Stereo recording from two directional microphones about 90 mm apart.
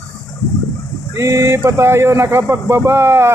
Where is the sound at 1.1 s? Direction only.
35° right (ahead or behind).